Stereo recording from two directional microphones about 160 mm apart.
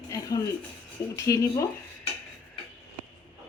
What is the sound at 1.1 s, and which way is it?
Speech, 20° left (ahead or behind).